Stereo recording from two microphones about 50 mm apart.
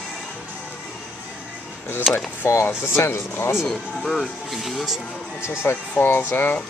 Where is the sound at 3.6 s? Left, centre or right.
Centre.